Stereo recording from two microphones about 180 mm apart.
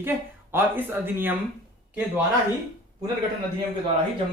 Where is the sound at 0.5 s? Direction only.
10° right (ahead or behind).